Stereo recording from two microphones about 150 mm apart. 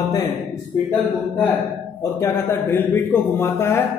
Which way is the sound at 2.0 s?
20° left (ahead or behind).